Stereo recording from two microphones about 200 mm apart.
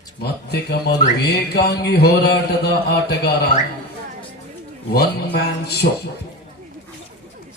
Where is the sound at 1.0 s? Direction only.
55° left (ahead or behind).